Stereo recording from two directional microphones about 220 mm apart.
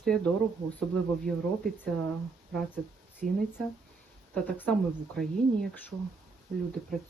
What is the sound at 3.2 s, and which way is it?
Speech, 35° right (ahead or behind).